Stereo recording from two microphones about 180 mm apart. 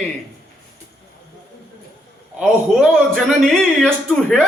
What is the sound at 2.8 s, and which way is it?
A man's voice, 5° left (ahead or behind).